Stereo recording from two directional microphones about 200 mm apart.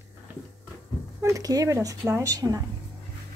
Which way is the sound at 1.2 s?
15° right (ahead or behind).